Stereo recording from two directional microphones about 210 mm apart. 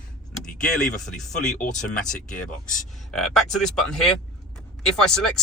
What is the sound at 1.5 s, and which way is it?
Speech, 35° left (ahead or behind).